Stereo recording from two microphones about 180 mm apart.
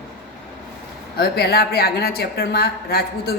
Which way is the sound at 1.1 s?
60° left (ahead or behind).